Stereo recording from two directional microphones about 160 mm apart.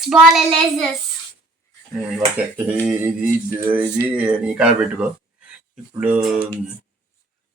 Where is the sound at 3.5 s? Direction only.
15° right (ahead or behind).